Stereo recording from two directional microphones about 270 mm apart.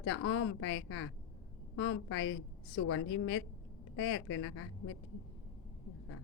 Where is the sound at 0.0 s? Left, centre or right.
Left.